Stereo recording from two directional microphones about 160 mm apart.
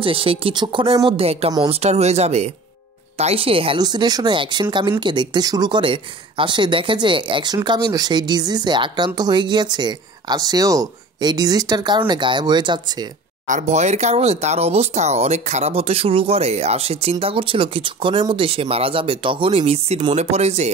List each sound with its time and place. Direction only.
0.0 s speech: 35° right (ahead or behind)
13.5 s speech: 50° right (ahead or behind)